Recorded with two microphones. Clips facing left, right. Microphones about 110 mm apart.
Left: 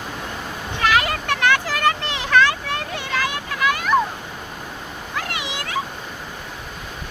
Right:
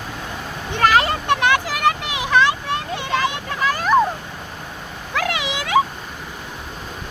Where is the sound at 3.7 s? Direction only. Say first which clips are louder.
Right 2 dB; 35° right (ahead or behind).